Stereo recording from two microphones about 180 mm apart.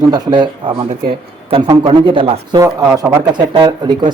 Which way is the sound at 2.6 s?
15° right (ahead or behind).